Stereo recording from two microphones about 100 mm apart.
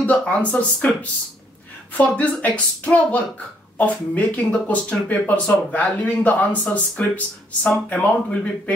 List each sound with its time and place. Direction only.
0.0 s speech: 15° left (ahead or behind)
2.0 s speech: 15° left (ahead or behind)